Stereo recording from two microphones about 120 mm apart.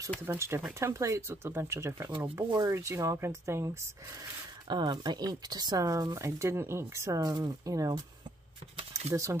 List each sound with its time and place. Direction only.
0.3 s speech: 20° right (ahead or behind)
4.6 s speech: 35° right (ahead or behind)
9.1 s speech: 25° right (ahead or behind)